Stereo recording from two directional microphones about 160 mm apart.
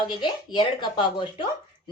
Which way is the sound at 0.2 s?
30° left (ahead or behind).